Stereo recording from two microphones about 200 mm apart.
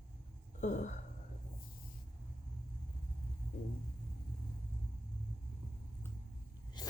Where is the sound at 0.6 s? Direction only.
35° left (ahead or behind).